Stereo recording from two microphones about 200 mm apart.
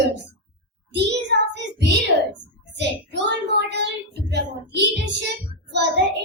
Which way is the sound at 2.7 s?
60° right (ahead or behind).